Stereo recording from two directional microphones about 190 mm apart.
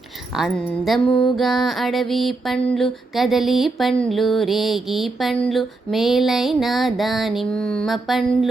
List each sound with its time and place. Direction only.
0.3 s mantra: centre (ahead or behind)